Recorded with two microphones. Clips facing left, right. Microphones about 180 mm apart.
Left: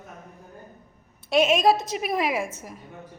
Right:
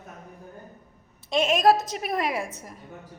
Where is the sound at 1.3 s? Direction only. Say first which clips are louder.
Left 1 dB; 5° left (ahead or behind).